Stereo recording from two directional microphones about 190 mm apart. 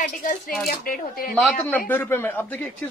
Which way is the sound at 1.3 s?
Centre (ahead or behind).